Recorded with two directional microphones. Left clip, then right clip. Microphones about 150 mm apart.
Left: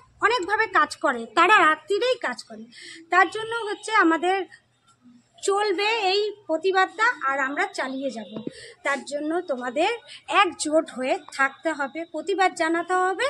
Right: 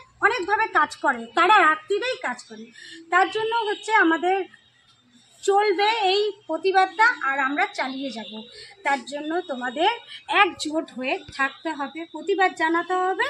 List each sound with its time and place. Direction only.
0.2 s a woman's voice: 30° left (ahead or behind)
3.3 s a woman's voice: 20° left (ahead or behind); by 8.2 s 45° left (ahead or behind)
8.8 s a woman's voice: 30° left (ahead or behind)
12.4 s a woman's voice: 35° left (ahead or behind)